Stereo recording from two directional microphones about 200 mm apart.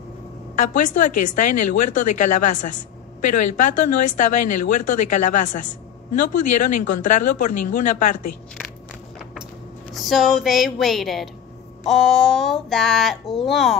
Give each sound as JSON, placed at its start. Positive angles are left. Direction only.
{"t": 0.6, "sound": "a woman's voice", "side_deg": 40}
{"t": 9.9, "sound": "speech", "side_deg": 0}